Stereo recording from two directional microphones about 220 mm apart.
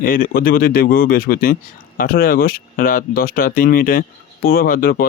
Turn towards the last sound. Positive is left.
turn(degrees=40)  # may be behind; listen again after turning